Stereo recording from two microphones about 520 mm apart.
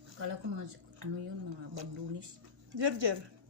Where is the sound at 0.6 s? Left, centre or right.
Right.